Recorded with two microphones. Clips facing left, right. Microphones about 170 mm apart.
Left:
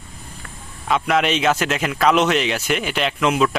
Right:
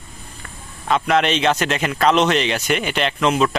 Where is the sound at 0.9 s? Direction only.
5° left (ahead or behind).